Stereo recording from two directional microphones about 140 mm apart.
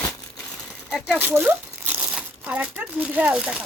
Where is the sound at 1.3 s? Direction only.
15° right (ahead or behind).